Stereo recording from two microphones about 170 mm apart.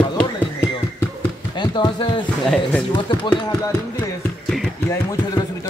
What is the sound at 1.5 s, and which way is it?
Speech, 25° left (ahead or behind).